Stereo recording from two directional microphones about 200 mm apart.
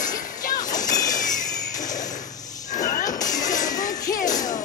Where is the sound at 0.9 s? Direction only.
20° left (ahead or behind).